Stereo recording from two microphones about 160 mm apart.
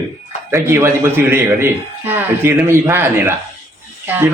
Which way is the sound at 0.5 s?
15° right (ahead or behind).